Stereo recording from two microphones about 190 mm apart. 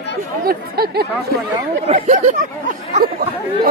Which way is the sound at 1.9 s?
40° right (ahead or behind).